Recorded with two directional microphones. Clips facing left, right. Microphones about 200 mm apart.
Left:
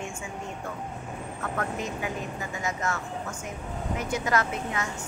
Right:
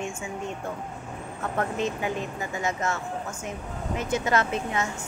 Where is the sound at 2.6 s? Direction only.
25° right (ahead or behind).